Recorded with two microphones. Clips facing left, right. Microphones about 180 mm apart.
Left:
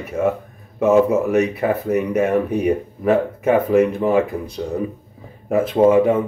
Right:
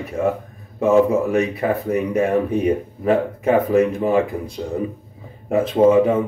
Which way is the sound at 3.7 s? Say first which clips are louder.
Left 1 dB; 25° left (ahead or behind).